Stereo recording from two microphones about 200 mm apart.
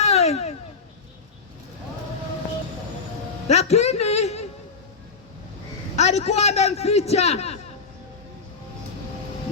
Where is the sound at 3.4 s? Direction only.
30° left (ahead or behind).